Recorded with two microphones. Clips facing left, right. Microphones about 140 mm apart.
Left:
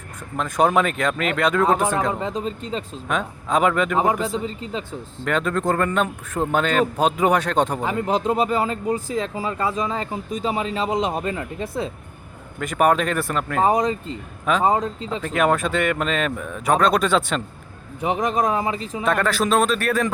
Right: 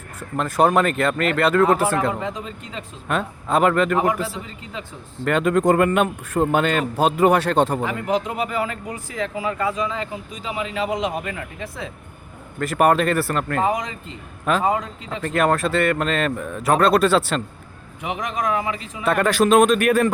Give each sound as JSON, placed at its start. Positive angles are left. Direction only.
{"t": 0.3, "sound": "a man's voice", "side_deg": -5}
{"t": 2.2, "sound": "speech", "side_deg": 35}
{"t": 3.1, "sound": "a man's voice", "side_deg": -5}
{"t": 3.9, "sound": "speech", "side_deg": 30}
{"t": 5.2, "sound": "a man's voice", "side_deg": -10}
{"t": 7.9, "sound": "speech", "side_deg": 30}
{"t": 12.5, "sound": "a man's voice", "side_deg": -5}
{"t": 13.7, "sound": "speech", "side_deg": 35}
{"t": 15.2, "sound": "a man's voice", "side_deg": 5}
{"t": 18.0, "sound": "speech", "side_deg": 35}
{"t": 19.0, "sound": "a man's voice", "side_deg": -10}